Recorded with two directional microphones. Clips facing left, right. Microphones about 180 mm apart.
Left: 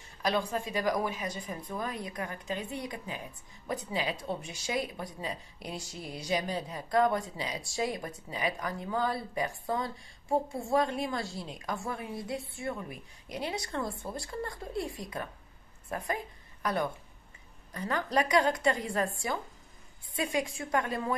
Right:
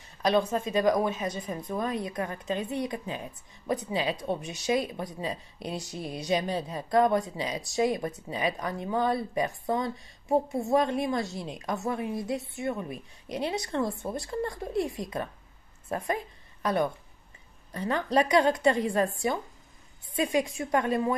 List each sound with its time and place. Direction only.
0.2 s a woman's voice: 20° right (ahead or behind)
16.6 s speech: 20° right (ahead or behind)